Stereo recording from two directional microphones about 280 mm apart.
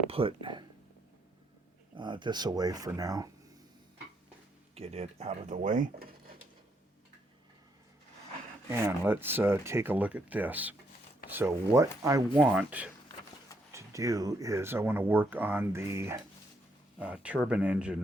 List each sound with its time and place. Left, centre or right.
0.1 s speech: centre
2.0 s speech: centre
4.7 s speech: right
8.7 s speech: centre